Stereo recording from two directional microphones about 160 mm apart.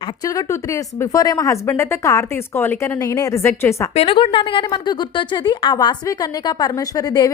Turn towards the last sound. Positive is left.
turn(degrees=25)  # may be behind; listen again after turning